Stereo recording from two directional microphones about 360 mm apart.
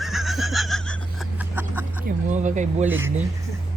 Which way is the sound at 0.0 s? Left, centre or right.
Centre.